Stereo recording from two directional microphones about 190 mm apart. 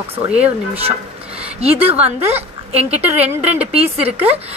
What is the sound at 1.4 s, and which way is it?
A woman's voice, 30° right (ahead or behind).